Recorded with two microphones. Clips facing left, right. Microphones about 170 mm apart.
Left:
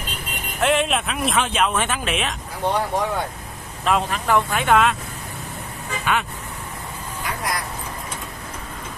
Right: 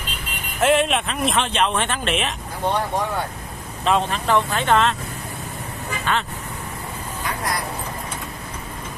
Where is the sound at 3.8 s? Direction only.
5° left (ahead or behind).